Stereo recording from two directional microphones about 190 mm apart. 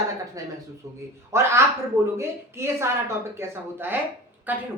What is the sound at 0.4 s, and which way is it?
A woman's voice, 15° right (ahead or behind).